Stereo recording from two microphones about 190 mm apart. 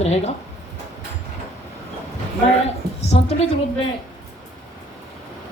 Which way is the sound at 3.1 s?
35° left (ahead or behind).